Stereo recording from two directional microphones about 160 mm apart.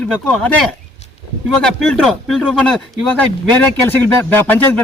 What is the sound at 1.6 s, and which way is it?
Speech, 5° left (ahead or behind).